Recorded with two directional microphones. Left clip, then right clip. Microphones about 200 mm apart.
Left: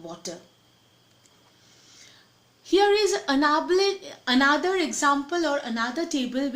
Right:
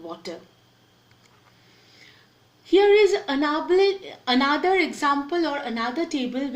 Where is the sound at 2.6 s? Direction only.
55° left (ahead or behind).